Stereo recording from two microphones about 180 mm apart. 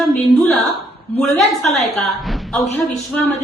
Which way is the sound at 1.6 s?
40° left (ahead or behind).